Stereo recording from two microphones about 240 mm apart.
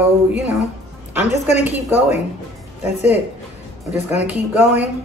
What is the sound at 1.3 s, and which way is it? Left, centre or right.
Speech, left.